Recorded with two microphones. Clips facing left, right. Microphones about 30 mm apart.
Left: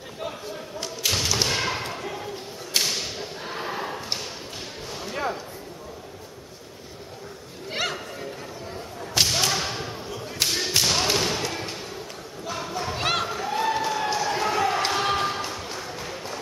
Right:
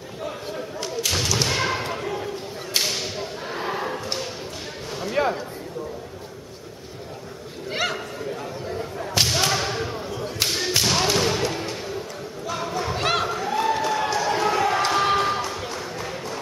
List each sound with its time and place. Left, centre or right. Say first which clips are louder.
0.7 s thump: right 1 dB; centre
1.5 s whip: right 3 dB; centre
5.1 s a sound: right 6 dB; right
7.7 s a sound: right 2 dB; centre
9.1 s whip: right 1 dB; centre
10.4 s thump: right 1 dB; centre
11.1 s a sound: right 3 dB; centre
14.1 s basketball bounce: right 3 dB; centre
14.9 s music: right 4 dB; centre